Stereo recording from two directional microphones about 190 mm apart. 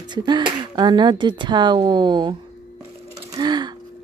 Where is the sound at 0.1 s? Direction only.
25° right (ahead or behind).